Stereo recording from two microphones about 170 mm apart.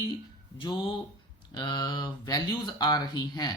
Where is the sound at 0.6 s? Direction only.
30° left (ahead or behind).